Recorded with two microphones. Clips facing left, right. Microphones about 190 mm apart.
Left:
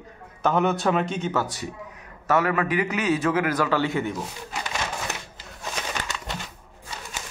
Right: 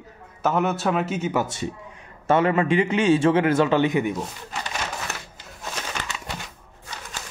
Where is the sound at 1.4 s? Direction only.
25° right (ahead or behind).